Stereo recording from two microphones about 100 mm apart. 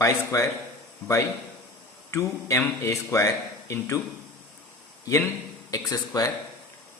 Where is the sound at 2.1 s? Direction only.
30° left (ahead or behind).